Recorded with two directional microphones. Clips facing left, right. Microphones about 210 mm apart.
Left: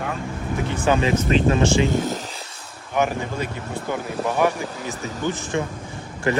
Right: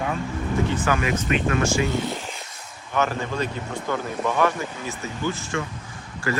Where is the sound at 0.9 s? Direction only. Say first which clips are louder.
Left 4 dB; 25° left (ahead or behind).